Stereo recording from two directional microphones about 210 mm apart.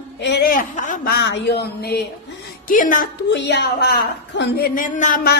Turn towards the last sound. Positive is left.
turn(degrees=40)  # may be behind; listen again after turning